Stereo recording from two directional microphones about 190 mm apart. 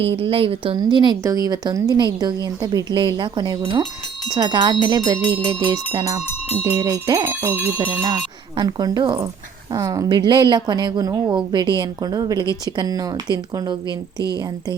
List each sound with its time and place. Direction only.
0.2 s a woman's voice: 30° right (ahead or behind)
6.7 s a sound: 20° right (ahead or behind)
8.5 s a woman's voice: 20° right (ahead or behind)